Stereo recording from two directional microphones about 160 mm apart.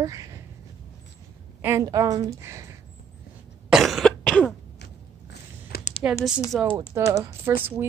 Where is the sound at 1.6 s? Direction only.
20° right (ahead or behind).